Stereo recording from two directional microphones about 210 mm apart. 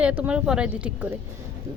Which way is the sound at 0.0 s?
5° right (ahead or behind).